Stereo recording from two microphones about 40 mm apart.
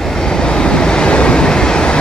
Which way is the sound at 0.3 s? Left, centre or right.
Left.